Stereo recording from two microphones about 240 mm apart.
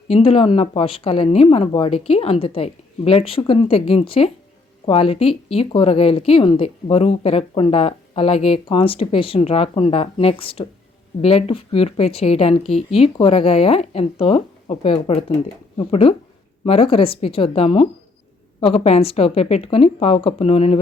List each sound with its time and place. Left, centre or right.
0.1 s a woman's voice: left